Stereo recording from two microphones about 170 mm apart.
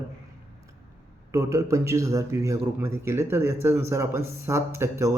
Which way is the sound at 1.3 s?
20° right (ahead or behind).